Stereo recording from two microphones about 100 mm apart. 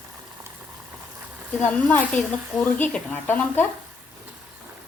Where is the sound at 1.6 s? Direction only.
15° left (ahead or behind).